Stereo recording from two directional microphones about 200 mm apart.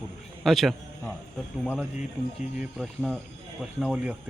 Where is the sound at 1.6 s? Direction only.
5° right (ahead or behind).